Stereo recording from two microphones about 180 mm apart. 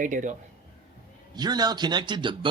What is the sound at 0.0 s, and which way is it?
Speech, 45° right (ahead or behind).